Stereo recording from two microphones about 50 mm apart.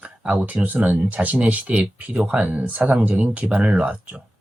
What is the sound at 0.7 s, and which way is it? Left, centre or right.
Speech, right.